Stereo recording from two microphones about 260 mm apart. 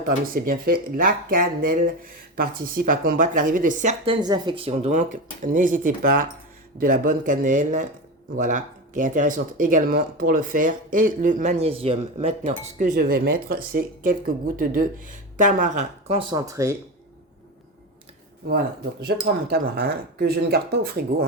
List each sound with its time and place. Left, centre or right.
0.3 s speech: right; by 16.7 s centre
18.4 s speech: right